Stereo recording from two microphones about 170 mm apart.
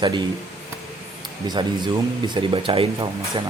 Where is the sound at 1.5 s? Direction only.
25° right (ahead or behind).